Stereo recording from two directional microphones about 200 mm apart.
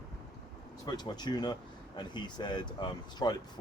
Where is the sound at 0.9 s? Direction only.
20° left (ahead or behind).